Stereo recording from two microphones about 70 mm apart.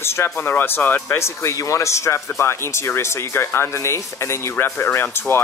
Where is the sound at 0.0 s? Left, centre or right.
Left.